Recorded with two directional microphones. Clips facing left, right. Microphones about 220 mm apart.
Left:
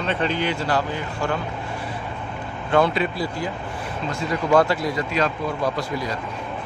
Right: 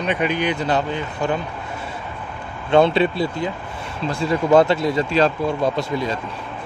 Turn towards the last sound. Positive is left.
turn(degrees=-25)  # may be behind; listen again after turning